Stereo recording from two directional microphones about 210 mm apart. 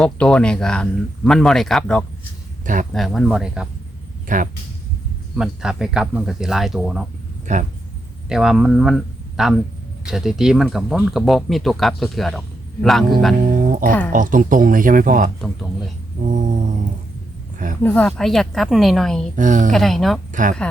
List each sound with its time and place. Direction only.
0.0 s speech: 5° left (ahead or behind)
4.3 s speech: 40° right (ahead or behind)
5.4 s speech: 5° right (ahead or behind)
7.5 s speech: 35° right (ahead or behind)
8.3 s speech: centre (ahead or behind)
13.5 s music: 40° right (ahead or behind)
14.1 s speech: 40° right (ahead or behind)
17.8 s speech: 5° left (ahead or behind)
19.4 s speech: 40° right (ahead or behind)
19.7 s speech: centre (ahead or behind)
20.3 s speech: 40° right (ahead or behind)